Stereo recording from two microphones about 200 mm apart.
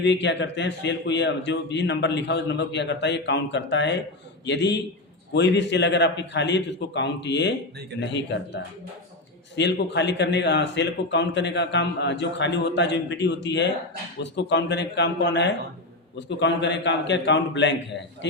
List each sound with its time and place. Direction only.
0.0 s speech: 60° left (ahead or behind)
9.6 s speech: 60° left (ahead or behind)